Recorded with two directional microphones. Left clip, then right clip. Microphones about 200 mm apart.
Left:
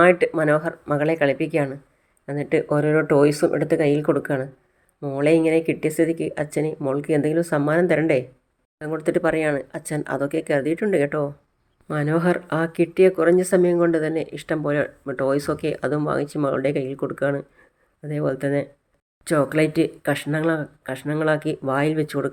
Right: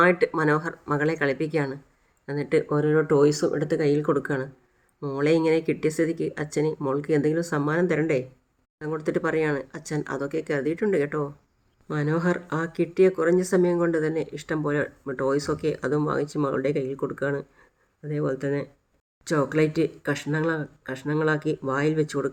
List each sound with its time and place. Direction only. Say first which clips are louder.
0.0 s speech: left 4 dB; 15° left (ahead or behind)